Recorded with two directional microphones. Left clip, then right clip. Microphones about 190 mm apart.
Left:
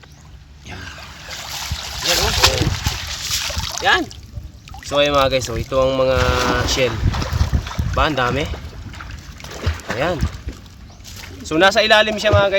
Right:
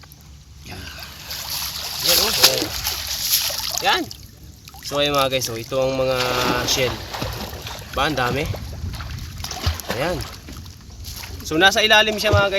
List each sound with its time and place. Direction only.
0.7 s boat: 5° right (ahead or behind)
4.9 s speech: 10° left (ahead or behind)
6.8 s boat: 35° right (ahead or behind)
7.9 s speech: 15° left (ahead or behind)
8.9 s a sound: 35° right (ahead or behind)
11.4 s speech: 15° left (ahead or behind)